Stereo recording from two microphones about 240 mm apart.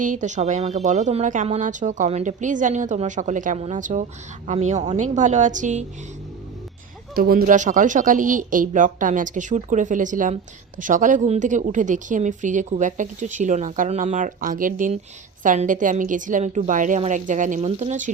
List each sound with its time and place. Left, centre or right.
0.0 s a woman's voice: right
7.2 s a woman's voice: right